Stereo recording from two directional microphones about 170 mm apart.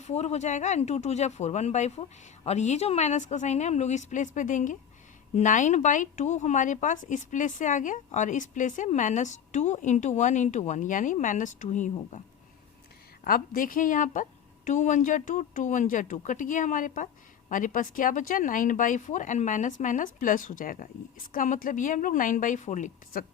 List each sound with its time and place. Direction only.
0.0 s speech: 40° left (ahead or behind)
13.2 s speech: 55° left (ahead or behind)